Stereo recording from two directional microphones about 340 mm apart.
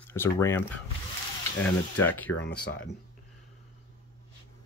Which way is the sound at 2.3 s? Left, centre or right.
Left.